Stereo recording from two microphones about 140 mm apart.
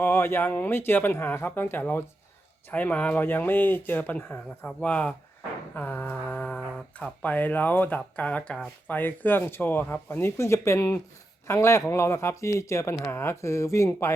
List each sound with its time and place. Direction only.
0.0 s speech: 15° left (ahead or behind)
5.7 s a sound: 15° left (ahead or behind)
7.0 s speech: 10° left (ahead or behind)